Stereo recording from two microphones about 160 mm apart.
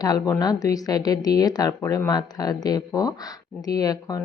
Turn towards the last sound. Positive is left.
turn(degrees=25)  # may be behind; listen again after turning